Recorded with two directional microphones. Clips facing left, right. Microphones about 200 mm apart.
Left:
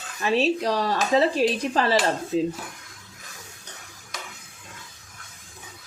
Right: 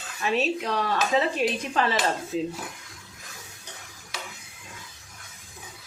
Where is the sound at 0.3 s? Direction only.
30° left (ahead or behind).